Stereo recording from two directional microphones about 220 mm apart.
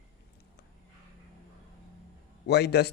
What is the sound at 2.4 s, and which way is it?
Speech, 50° left (ahead or behind).